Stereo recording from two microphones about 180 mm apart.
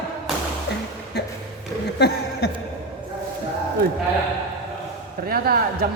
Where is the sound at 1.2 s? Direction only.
70° left (ahead or behind).